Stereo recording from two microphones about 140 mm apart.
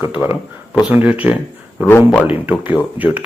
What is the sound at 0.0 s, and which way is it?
Speech, 15° right (ahead or behind).